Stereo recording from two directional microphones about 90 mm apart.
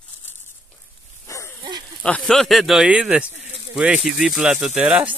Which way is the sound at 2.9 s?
15° right (ahead or behind).